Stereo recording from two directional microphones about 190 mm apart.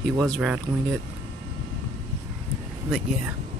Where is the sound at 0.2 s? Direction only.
Centre (ahead or behind).